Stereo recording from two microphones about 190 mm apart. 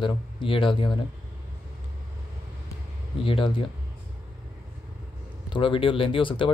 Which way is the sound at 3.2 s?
30° left (ahead or behind).